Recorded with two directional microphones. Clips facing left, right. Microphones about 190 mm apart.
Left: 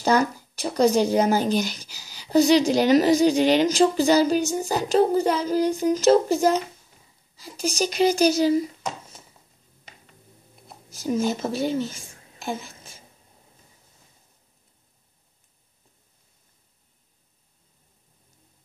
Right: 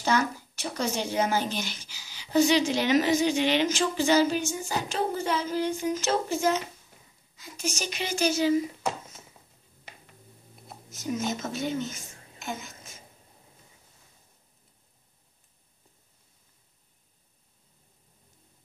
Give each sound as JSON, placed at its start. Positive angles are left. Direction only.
{"t": 0.0, "sound": "speech", "side_deg": 35}
{"t": 10.9, "sound": "a woman's voice", "side_deg": 35}